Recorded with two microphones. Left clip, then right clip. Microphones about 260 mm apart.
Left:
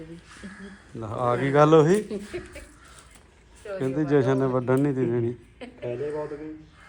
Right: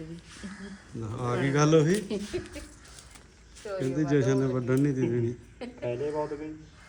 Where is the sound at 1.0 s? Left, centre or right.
Centre.